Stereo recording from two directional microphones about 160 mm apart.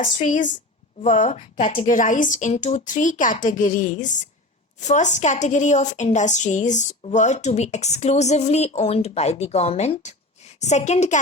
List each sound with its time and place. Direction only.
0.0 s a woman's voice: 55° left (ahead or behind)
1.0 s a woman's voice: 45° left (ahead or behind)